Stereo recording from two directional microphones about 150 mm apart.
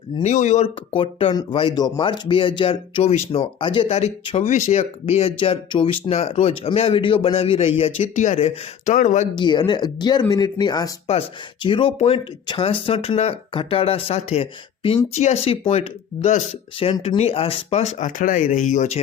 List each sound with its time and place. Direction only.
0.2 s speech: 50° left (ahead or behind)
0.9 s speech: 35° left (ahead or behind)
4.4 s speech: 55° left (ahead or behind)
9.3 s speech: 30° left (ahead or behind)
11.0 s speech: 40° left (ahead or behind)